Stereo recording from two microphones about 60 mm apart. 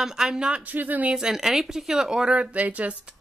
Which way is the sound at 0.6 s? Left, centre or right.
Right.